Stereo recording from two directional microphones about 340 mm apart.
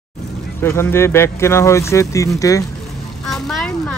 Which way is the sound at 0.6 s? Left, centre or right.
Centre.